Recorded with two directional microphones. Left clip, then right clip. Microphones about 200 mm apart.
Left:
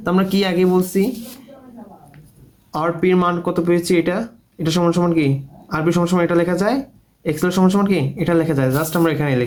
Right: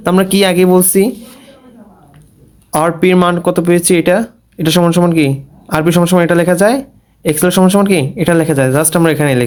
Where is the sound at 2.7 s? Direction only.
50° right (ahead or behind).